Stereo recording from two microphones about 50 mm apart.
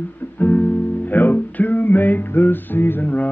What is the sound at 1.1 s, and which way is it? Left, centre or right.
Music, left.